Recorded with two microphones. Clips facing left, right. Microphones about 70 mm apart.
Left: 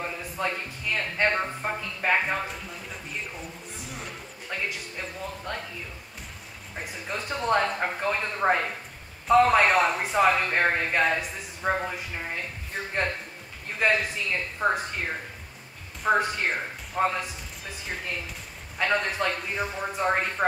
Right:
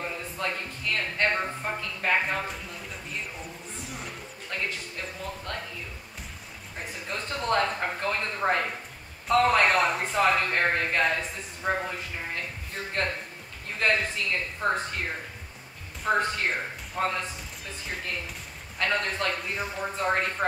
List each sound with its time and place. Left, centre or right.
0.0 s speech: centre
4.5 s speech: centre
6.8 s speech: centre
13.7 s speech: centre